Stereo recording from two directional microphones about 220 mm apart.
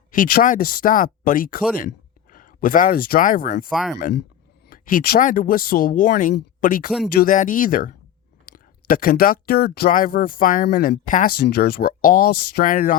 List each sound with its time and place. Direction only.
0.1 s speech: 40° left (ahead or behind)
3.7 s speech: centre (ahead or behind)
4.7 s speech: 40° left (ahead or behind)